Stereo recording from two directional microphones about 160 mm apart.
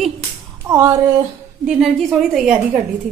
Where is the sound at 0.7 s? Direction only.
20° right (ahead or behind).